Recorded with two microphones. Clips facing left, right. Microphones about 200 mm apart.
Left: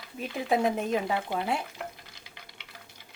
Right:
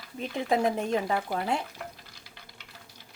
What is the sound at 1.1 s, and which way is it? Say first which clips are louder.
Speech: right 1 dB; 20° left (ahead or behind).